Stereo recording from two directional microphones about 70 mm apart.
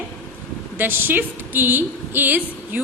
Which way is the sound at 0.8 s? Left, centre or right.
Right.